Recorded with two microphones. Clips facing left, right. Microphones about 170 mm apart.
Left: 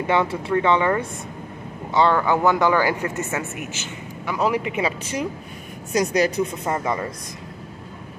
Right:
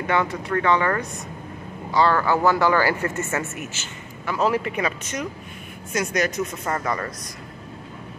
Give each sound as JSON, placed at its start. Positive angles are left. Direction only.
{"t": 0.0, "sound": "speech", "side_deg": 25}
{"t": 4.7, "sound": "speech", "side_deg": 30}
{"t": 6.6, "sound": "speech", "side_deg": 15}